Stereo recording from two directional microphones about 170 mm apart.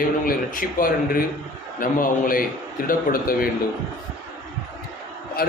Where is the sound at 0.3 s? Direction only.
60° left (ahead or behind).